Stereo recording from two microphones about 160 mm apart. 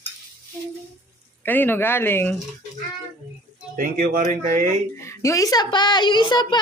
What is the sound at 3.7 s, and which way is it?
Speech, 60° right (ahead or behind).